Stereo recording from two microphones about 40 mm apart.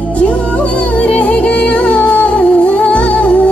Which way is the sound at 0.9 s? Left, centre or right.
Left.